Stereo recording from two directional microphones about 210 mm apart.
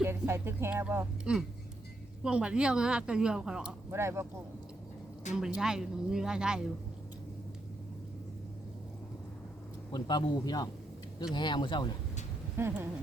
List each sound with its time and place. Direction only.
0.0 s a woman's voice: 10° right (ahead or behind)
5.5 s a woman's voice: centre (ahead or behind)
9.9 s a man's voice: 20° left (ahead or behind)
12.5 s a woman's voice: 10° right (ahead or behind)